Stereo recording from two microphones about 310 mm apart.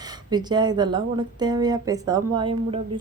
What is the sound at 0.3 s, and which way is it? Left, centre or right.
A woman's voice, centre.